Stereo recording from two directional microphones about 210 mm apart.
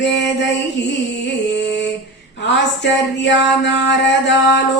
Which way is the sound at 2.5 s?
55° left (ahead or behind).